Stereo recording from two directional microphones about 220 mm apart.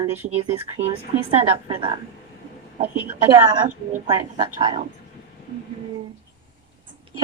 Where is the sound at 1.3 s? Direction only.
25° right (ahead or behind).